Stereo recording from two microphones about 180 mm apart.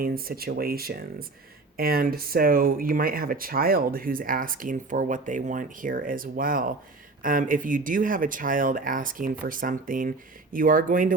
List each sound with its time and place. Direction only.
0.0 s speech: 55° right (ahead or behind)